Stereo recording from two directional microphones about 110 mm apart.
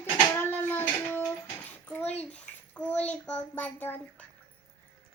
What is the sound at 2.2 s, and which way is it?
A child's voice, 15° left (ahead or behind).